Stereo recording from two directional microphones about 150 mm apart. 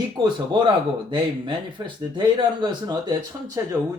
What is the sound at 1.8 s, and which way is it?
Speech, 25° right (ahead or behind).